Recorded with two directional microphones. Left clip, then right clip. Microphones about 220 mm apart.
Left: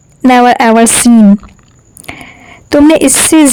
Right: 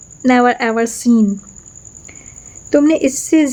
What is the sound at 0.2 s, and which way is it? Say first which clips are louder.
A woman's voice: left 7 dB; 45° left (ahead or behind).